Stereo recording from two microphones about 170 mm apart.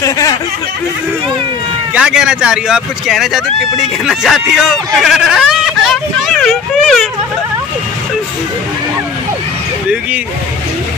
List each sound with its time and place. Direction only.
0.0 s speech: 20° left (ahead or behind)
2.0 s speech: 5° right (ahead or behind)